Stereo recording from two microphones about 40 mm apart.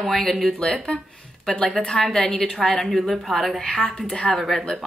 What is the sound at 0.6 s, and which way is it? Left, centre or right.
A woman's voice, centre.